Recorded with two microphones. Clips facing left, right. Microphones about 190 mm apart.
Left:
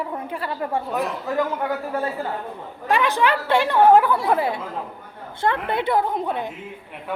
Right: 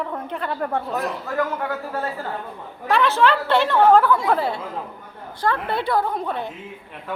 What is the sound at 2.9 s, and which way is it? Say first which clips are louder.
A woman's voice: right 2 dB; 15° left (ahead or behind).